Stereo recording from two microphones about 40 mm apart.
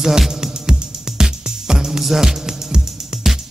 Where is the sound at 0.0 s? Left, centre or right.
Centre.